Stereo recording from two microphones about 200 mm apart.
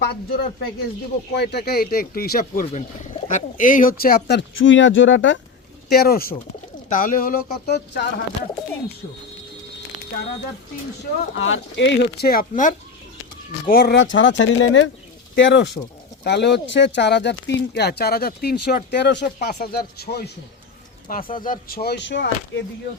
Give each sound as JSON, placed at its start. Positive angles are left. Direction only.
{"t": 0.0, "sound": "speech", "side_deg": 55}
{"t": 5.9, "sound": "speech", "side_deg": 50}
{"t": 11.3, "sound": "speech", "side_deg": 75}